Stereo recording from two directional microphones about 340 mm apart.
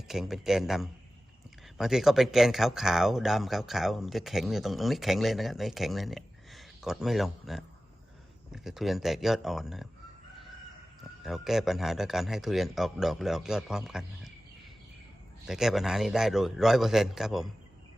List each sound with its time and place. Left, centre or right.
0.1 s speech: centre
11.2 s speech: centre
15.4 s speech: centre